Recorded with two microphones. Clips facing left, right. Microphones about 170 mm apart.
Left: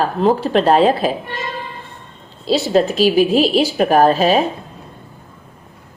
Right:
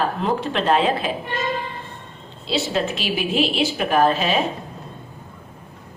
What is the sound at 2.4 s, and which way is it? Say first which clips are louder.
A woman's voice: left 8 dB; 40° left (ahead or behind).